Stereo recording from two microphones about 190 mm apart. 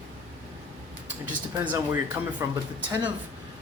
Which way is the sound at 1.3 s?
10° right (ahead or behind).